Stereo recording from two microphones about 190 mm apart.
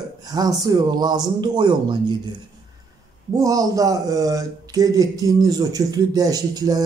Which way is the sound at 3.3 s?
20° right (ahead or behind).